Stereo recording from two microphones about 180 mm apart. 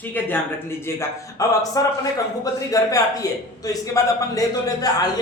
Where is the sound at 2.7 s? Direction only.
20° left (ahead or behind).